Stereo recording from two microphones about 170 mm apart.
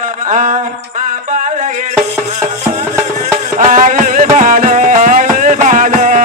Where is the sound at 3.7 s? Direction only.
50° right (ahead or behind).